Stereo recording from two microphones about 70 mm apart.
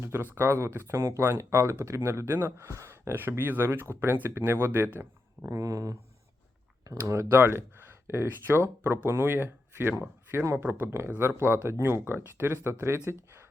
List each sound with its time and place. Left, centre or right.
0.0 s speech: right
5.5 s speech: right
7.3 s speech: right